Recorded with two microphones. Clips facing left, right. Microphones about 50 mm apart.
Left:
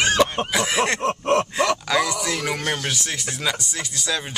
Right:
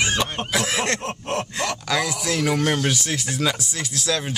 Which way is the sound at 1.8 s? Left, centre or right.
Centre.